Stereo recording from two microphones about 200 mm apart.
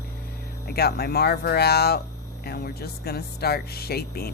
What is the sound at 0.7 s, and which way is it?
Speech, 50° left (ahead or behind).